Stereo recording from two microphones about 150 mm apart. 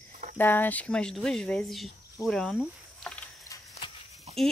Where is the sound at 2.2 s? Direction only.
5° left (ahead or behind).